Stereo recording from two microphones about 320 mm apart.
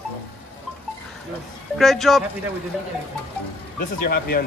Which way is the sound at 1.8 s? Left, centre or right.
Centre.